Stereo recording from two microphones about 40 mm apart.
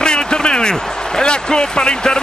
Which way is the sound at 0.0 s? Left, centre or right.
Centre.